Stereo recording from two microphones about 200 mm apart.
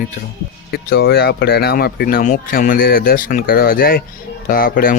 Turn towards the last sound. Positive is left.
turn(degrees=45)  # may be behind; listen again after turning